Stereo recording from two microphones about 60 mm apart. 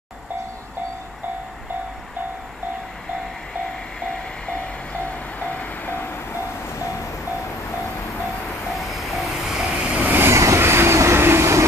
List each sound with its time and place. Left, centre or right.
4.0 s train: centre; by 6.2 s left
8.7 s vehicle: centre
10.0 s vehicle: right
10.3 s train: right